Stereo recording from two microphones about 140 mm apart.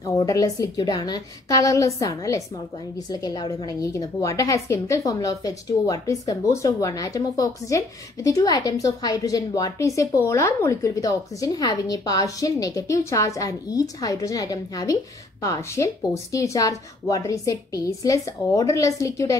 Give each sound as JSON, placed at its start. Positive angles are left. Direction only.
{"t": 0.0, "sound": "a woman's voice", "side_deg": 25}